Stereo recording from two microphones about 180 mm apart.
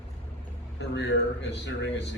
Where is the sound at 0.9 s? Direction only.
75° left (ahead or behind).